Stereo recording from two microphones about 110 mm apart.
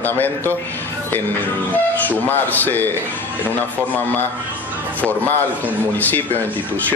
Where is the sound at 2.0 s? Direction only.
15° left (ahead or behind).